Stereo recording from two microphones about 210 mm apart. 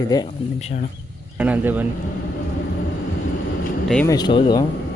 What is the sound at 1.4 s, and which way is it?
Speech, 10° right (ahead or behind).